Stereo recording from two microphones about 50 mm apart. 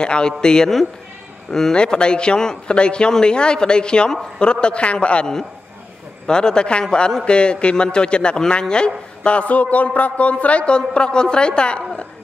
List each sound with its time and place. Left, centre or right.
0.0 s a man's voice: centre